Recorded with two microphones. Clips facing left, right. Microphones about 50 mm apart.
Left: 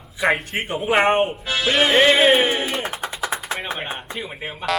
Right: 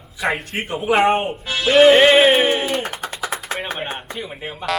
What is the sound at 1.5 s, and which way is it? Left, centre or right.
Speech, centre.